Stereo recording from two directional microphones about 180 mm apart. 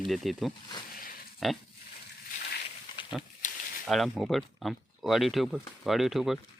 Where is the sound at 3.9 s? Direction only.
Centre (ahead or behind).